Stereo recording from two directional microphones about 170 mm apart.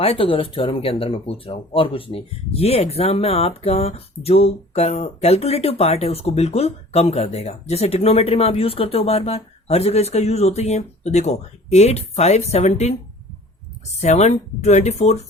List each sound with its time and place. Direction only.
0.0 s speech: 30° left (ahead or behind)